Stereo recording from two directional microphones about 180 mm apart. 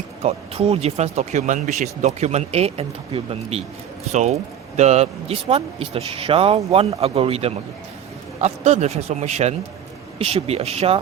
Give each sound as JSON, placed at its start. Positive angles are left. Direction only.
{"t": 0.2, "sound": "speech", "side_deg": -35}